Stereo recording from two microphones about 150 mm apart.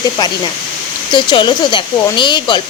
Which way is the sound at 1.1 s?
30° left (ahead or behind).